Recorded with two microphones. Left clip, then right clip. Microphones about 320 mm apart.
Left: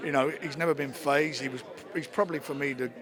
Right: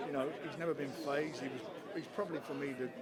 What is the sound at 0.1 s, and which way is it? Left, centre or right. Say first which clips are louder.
Speech: left 11 dB; left.